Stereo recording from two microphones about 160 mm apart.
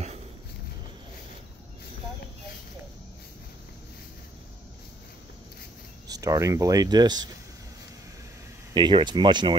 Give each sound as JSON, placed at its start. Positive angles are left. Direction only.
{"t": 6.0, "sound": "speech", "side_deg": -20}
{"t": 8.7, "sound": "speech", "side_deg": -30}